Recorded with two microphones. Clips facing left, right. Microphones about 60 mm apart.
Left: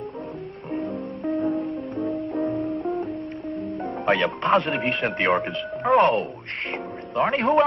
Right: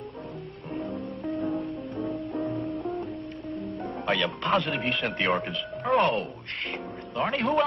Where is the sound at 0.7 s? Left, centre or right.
Left.